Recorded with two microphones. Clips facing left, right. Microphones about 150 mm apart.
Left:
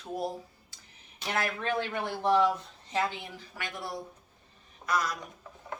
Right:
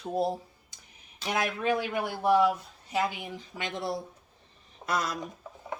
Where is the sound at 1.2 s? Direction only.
10° right (ahead or behind).